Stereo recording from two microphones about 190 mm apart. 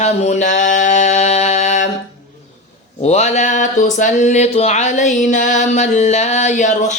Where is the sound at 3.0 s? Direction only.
35° left (ahead or behind).